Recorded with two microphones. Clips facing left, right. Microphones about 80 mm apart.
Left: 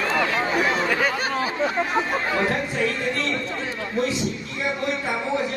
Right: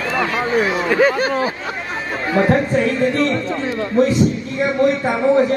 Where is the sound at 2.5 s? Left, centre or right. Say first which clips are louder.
Right 8 dB; right.